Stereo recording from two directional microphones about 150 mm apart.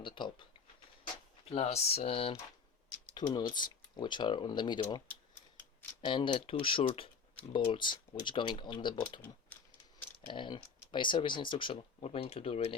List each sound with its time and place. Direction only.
0.0 s speech: 35° left (ahead or behind)
1.5 s speech: 45° left (ahead or behind)
3.2 s speech: 30° left (ahead or behind)
6.1 s speech: 35° left (ahead or behind)
10.2 s speech: 30° left (ahead or behind)